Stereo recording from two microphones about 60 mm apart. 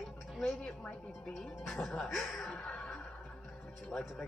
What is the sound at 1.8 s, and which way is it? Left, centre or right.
A woman's voice, centre.